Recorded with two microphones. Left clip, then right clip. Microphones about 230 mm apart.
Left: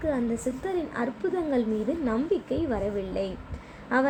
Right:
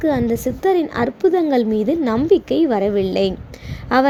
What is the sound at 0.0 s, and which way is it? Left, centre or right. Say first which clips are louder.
A woman's voice: right 10 dB; right.